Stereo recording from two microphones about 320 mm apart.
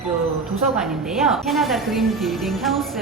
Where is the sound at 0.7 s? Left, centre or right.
Centre.